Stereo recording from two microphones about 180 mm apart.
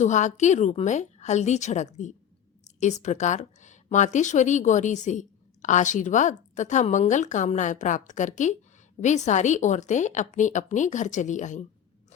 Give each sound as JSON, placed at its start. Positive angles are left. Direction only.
{"t": 0.0, "sound": "a woman's voice", "side_deg": 40}